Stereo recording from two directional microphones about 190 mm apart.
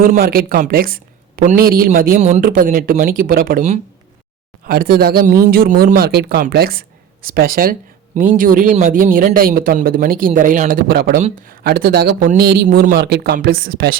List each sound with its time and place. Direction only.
0.0 s speech: 50° right (ahead or behind)